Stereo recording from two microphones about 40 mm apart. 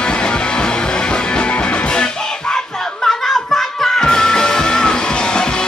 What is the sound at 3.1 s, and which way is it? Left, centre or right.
Music, centre.